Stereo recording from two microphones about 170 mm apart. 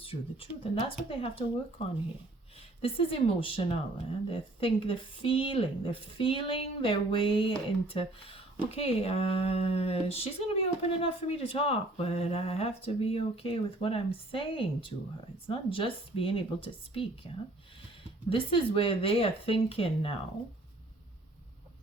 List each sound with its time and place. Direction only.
0.0 s speech: 35° left (ahead or behind)
2.6 s speech: 35° left (ahead or behind)